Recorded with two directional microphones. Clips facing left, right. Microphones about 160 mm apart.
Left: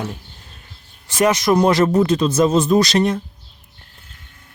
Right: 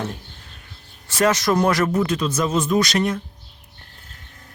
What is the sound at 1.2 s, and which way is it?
Speech, 15° left (ahead or behind).